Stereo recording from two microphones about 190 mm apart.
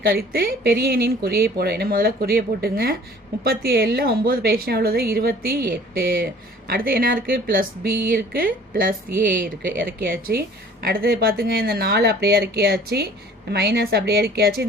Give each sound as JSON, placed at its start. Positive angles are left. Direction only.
{"t": 0.0, "sound": "a woman's voice", "side_deg": -50}